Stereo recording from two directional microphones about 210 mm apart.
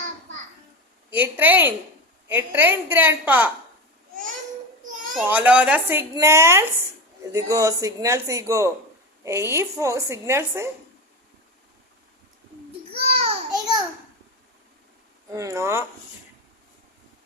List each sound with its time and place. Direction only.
1.1 s a woman's voice: 10° right (ahead or behind)
5.1 s a woman's voice: 10° right (ahead or behind)
12.9 s a sound: 30° right (ahead or behind)
15.3 s a woman's voice: 15° right (ahead or behind)